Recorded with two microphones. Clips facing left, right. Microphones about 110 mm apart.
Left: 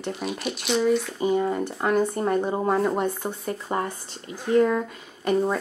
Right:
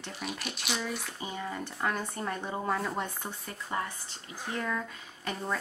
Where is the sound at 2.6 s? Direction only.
30° left (ahead or behind).